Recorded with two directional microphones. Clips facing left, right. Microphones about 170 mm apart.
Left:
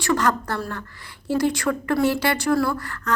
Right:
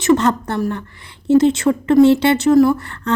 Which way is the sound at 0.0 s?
25° right (ahead or behind).